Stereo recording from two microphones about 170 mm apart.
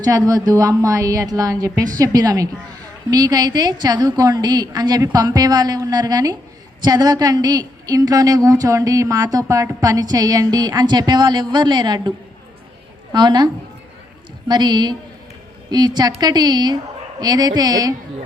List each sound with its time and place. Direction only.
0.3 s a woman's voice: 20° right (ahead or behind)
13.1 s a woman's voice: 25° right (ahead or behind)